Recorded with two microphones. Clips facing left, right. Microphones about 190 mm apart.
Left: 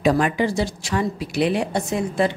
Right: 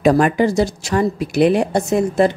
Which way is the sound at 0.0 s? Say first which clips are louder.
Right 5 dB; 45° right (ahead or behind).